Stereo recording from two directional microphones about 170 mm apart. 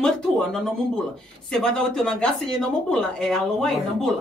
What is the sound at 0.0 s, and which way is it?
Speech, 5° left (ahead or behind).